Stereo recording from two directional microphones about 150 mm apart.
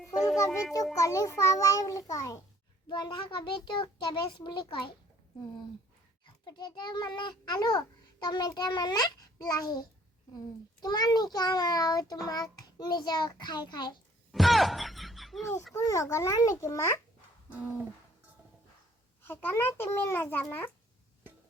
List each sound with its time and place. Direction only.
0.9 s a child's voice: 20° left (ahead or behind)
6.2 s a child's voice: 30° left (ahead or behind)
10.8 s a child's voice: 25° left (ahead or behind)
14.3 s a sound: centre (ahead or behind)
15.7 s a child's voice: 20° left (ahead or behind)
17.5 s a sound: 10° right (ahead or behind)
19.2 s a child's voice: 15° left (ahead or behind)